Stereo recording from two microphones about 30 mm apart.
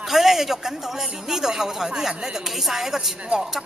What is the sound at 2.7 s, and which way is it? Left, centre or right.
Speech, centre.